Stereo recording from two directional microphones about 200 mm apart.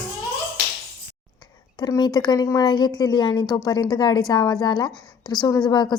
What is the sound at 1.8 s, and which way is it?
A woman's voice, 20° left (ahead or behind).